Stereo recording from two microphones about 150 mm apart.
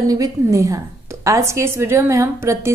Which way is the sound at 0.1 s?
25° right (ahead or behind).